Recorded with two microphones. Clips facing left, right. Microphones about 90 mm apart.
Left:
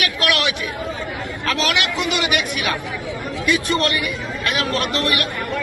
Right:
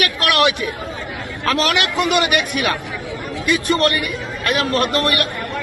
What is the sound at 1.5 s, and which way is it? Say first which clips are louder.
Speech: right 3 dB; 45° right (ahead or behind).